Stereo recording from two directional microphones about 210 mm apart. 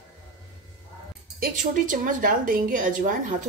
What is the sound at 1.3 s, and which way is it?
Speech, 40° right (ahead or behind).